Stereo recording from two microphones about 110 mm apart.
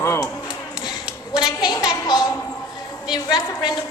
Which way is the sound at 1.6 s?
40° left (ahead or behind).